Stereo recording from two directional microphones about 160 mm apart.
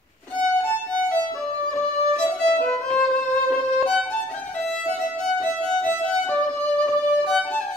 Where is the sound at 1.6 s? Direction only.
5° left (ahead or behind).